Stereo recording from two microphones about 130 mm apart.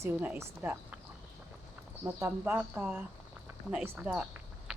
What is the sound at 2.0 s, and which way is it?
Speech, 20° right (ahead or behind).